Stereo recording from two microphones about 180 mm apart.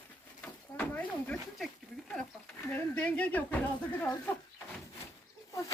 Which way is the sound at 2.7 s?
5° left (ahead or behind).